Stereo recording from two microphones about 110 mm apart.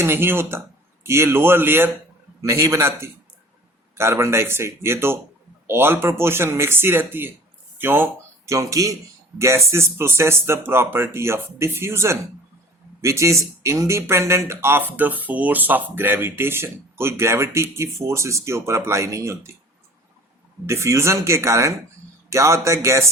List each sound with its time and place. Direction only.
0.0 s speech: 20° right (ahead or behind)
20.7 s speech: 25° right (ahead or behind)